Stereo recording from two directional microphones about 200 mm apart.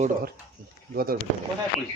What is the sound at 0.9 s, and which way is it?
Speech, 50° right (ahead or behind).